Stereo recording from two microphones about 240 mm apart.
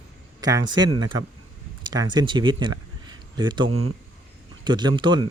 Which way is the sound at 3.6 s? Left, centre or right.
Right.